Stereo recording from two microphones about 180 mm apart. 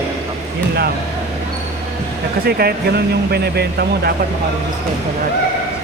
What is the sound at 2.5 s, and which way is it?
Speech, 60° right (ahead or behind).